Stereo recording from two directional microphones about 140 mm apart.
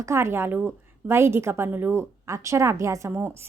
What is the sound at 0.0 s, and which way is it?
A woman's voice, 20° right (ahead or behind).